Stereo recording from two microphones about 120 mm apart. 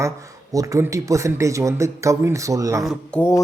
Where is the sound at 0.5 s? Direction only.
30° right (ahead or behind).